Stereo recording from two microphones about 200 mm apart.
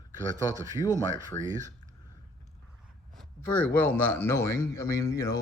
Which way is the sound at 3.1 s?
5° left (ahead or behind).